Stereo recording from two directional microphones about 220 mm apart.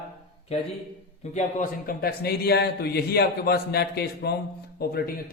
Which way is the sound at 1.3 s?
40° left (ahead or behind).